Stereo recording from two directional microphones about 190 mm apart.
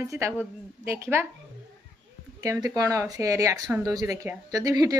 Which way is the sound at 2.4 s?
20° right (ahead or behind).